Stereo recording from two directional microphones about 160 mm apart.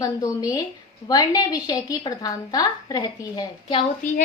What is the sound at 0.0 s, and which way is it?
A woman's voice, 20° left (ahead or behind).